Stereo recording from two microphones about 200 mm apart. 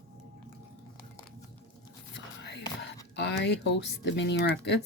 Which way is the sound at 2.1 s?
60° left (ahead or behind).